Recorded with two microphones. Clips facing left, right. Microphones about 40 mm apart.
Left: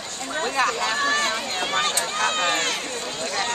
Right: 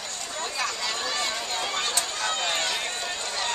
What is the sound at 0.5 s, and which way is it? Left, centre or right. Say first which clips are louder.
Chatter: left 8 dB; left.